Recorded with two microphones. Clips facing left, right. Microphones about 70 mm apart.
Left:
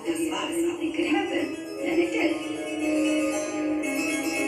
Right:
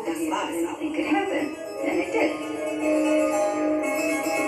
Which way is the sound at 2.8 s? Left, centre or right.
Right.